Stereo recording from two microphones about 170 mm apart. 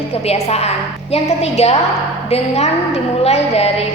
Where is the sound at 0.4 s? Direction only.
40° left (ahead or behind).